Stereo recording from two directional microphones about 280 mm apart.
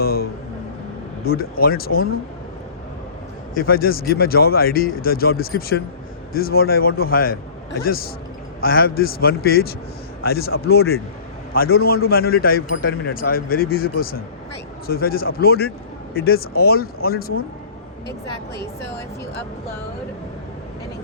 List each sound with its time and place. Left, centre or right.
0.0 s speech: left
1.6 s speech: left
3.5 s speech: left